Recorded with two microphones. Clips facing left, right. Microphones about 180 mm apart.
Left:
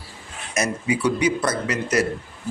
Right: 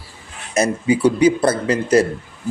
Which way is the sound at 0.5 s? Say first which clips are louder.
Right 6 dB; 30° right (ahead or behind).